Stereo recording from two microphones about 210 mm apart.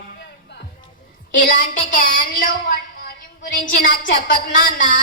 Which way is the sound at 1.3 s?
40° left (ahead or behind).